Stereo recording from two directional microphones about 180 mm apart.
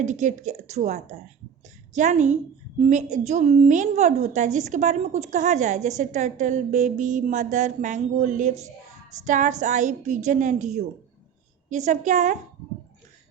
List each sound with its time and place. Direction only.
0.0 s a woman's voice: 45° right (ahead or behind)